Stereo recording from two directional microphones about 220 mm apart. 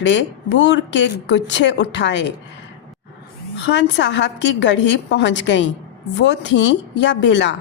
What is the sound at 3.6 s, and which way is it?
A woman's voice, 55° left (ahead or behind).